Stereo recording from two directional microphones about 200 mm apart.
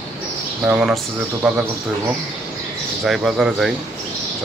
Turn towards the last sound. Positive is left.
turn(degrees=-5)  # may be behind; listen again after turning